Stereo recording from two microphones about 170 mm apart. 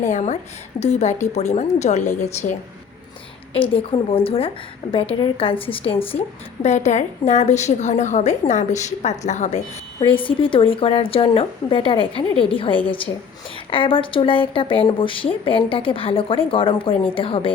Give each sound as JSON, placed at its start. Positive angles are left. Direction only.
{"t": 0.0, "sound": "a woman's voice", "side_deg": 45}
{"t": 3.5, "sound": "a woman's voice", "side_deg": 30}
{"t": 10.0, "sound": "a woman's voice", "side_deg": 30}